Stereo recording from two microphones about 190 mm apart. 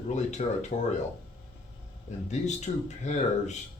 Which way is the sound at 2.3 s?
40° left (ahead or behind).